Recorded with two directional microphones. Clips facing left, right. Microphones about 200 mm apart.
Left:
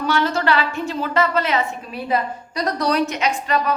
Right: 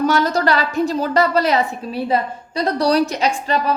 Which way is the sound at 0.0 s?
40° right (ahead or behind).